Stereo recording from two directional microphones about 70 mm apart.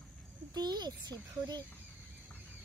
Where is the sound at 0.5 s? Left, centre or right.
Right.